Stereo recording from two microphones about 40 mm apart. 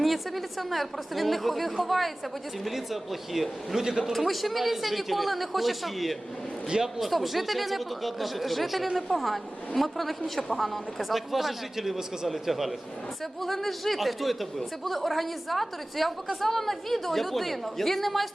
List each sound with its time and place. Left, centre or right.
0.0 s speech: centre
3.8 s a man's voice: centre
4.3 s speech: centre
6.7 s speech: centre
7.0 s speech: centre